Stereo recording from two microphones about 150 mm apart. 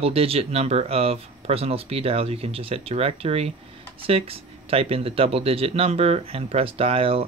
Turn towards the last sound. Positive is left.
turn(degrees=-40)  # may be behind; listen again after turning